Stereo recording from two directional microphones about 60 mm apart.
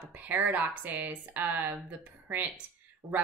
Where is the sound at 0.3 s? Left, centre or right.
Right.